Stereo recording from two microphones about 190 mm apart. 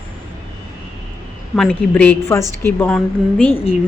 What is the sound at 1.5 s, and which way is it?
A woman's voice, 5° left (ahead or behind).